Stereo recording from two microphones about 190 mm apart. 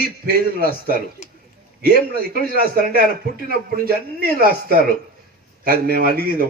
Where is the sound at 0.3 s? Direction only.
50° right (ahead or behind).